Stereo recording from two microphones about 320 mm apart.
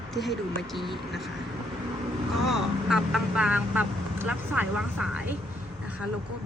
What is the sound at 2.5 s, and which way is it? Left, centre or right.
Speech, centre.